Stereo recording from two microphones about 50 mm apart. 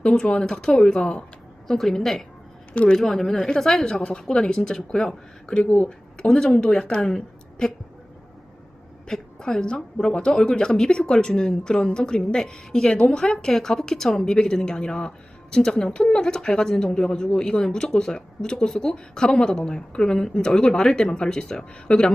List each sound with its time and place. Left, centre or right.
0.0 s a woman's voice: centre
2.7 s speech: left
3.0 s a woman's voice: centre; by 6.2 s left
6.2 s a woman's voice: centre
9.0 s a woman's voice: centre